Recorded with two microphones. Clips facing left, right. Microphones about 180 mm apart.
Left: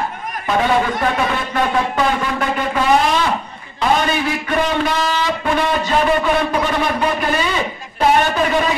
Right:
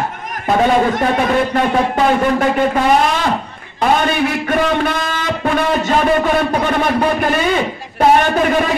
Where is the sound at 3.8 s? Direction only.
50° right (ahead or behind).